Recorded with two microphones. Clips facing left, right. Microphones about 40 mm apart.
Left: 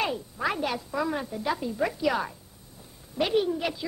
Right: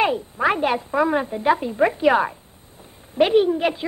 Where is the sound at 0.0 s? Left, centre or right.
Right.